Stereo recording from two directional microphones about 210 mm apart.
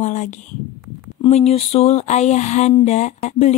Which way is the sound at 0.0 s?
35° left (ahead or behind).